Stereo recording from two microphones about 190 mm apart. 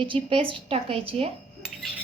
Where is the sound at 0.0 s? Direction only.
25° right (ahead or behind).